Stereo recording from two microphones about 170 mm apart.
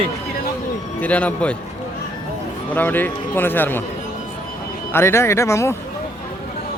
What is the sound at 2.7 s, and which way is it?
A man's voice, 10° left (ahead or behind).